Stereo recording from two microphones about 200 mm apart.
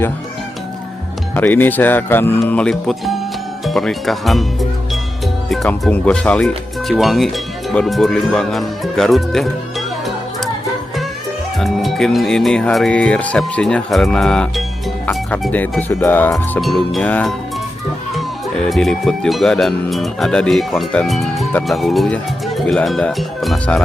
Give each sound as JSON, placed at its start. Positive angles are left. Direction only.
{"t": 1.4, "sound": "speech", "side_deg": 10}
{"t": 5.5, "sound": "speech", "side_deg": 0}
{"t": 11.6, "sound": "speech", "side_deg": 0}
{"t": 18.7, "sound": "speech", "side_deg": 0}